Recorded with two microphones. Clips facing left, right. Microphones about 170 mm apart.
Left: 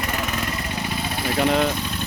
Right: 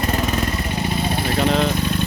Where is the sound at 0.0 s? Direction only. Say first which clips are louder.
Right 5 dB; 30° right (ahead or behind).